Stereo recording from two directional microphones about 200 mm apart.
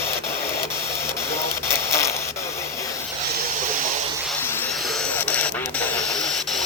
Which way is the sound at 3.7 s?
40° right (ahead or behind).